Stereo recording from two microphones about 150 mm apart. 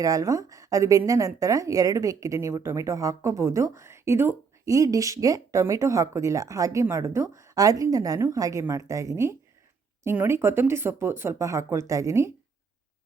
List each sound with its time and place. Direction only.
0.0 s a woman's voice: 25° right (ahead or behind)